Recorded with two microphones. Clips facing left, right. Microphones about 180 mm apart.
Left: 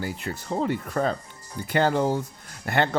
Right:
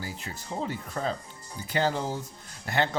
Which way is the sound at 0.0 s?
60° left (ahead or behind).